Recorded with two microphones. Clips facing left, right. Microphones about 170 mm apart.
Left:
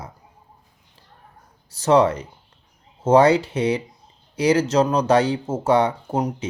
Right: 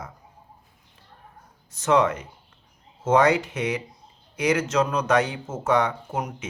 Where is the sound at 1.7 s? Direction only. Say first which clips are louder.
Left 4 dB; 35° left (ahead or behind).